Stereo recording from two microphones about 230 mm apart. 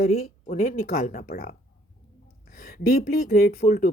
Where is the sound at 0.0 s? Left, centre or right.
Left.